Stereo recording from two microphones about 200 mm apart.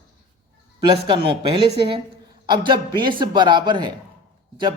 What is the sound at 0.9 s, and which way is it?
A man's voice, 25° right (ahead or behind).